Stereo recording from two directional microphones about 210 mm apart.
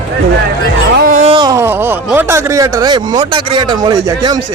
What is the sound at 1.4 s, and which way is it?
Speech, 15° right (ahead or behind).